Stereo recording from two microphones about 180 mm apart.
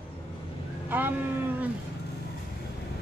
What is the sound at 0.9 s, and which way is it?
Speech, 10° right (ahead or behind).